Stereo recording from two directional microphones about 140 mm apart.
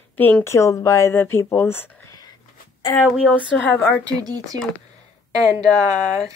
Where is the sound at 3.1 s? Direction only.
Centre (ahead or behind).